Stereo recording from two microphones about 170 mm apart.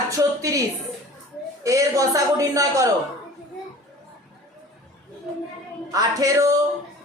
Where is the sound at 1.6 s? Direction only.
20° right (ahead or behind).